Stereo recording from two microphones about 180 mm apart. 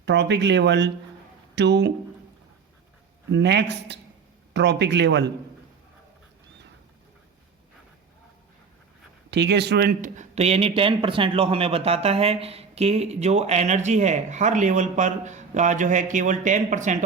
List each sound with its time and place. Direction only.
0.0 s speech: 75° right (ahead or behind)
3.3 s speech: 75° right (ahead or behind)
9.3 s speech: 70° right (ahead or behind)
10.2 s a man's voice: 35° right (ahead or behind)